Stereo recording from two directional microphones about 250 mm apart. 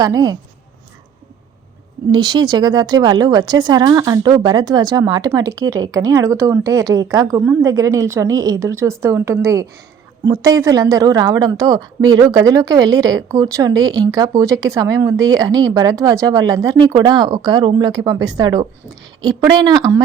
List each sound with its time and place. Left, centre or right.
0.0 s a woman's voice: centre
2.1 s a woman's voice: centre